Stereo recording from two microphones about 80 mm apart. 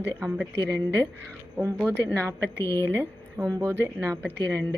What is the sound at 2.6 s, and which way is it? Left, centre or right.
Speech, left.